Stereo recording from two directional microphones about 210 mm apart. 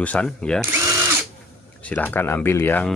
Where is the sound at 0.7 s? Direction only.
15° right (ahead or behind).